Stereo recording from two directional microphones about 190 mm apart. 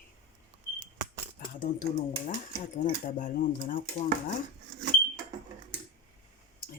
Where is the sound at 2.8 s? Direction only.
45° left (ahead or behind).